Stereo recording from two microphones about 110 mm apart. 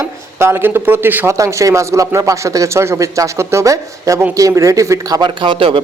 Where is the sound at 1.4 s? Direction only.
30° right (ahead or behind).